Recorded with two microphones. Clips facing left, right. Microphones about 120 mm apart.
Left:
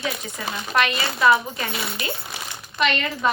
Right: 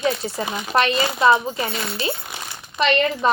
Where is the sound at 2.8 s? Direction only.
35° right (ahead or behind).